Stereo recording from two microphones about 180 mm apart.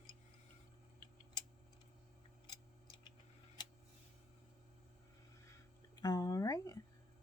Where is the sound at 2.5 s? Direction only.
25° left (ahead or behind).